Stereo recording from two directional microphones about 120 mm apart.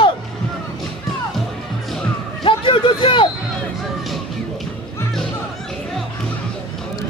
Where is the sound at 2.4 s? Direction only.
45° left (ahead or behind).